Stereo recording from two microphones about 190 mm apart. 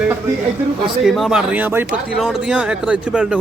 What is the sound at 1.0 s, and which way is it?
A man's voice, centre (ahead or behind).